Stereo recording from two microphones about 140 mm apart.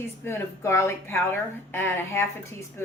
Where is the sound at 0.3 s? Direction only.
20° left (ahead or behind).